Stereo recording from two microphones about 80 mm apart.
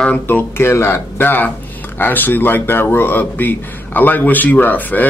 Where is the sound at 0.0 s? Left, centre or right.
Left.